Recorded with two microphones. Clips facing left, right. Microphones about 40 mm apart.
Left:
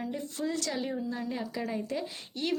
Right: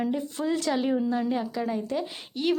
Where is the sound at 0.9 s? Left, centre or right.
Right.